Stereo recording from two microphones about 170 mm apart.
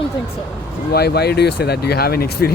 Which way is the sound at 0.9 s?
70° left (ahead or behind).